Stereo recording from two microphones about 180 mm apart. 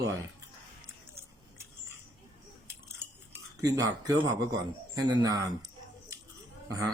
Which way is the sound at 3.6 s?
20° right (ahead or behind).